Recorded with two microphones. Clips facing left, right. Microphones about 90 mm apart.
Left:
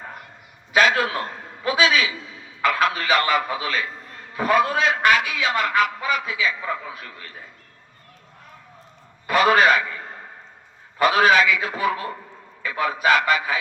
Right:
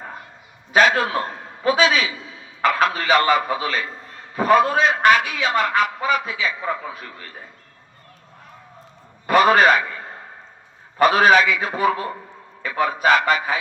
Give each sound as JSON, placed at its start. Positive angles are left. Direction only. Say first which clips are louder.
{"t": 0.7, "sound": "a man's voice", "louder": "right 2 dB", "side_deg": -30}
{"t": 9.2, "sound": "a man's voice", "louder": "right 3 dB", "side_deg": -25}
{"t": 10.9, "sound": "a man's voice", "louder": "right 2 dB", "side_deg": -25}